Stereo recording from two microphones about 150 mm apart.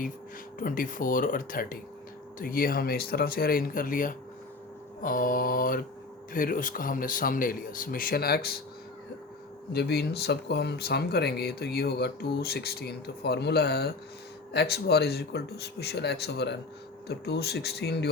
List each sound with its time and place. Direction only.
0.6 s speech: 65° left (ahead or behind); by 8.5 s 90° left
9.7 s speech: 90° left